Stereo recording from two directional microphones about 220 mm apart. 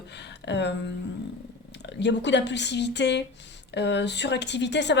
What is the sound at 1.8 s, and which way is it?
A woman's voice, 50° left (ahead or behind).